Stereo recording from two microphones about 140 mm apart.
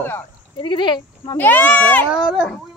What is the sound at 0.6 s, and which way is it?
Speech, 35° left (ahead or behind).